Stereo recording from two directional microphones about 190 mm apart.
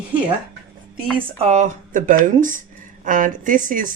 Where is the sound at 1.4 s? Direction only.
35° right (ahead or behind).